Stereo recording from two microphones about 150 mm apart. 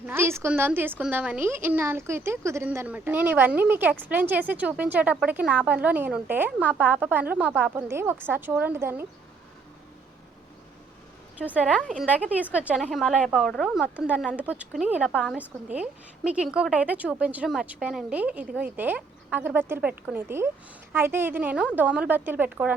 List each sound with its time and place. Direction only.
0.0 s a woman's voice: 15° right (ahead or behind)
11.3 s a woman's voice: 10° right (ahead or behind)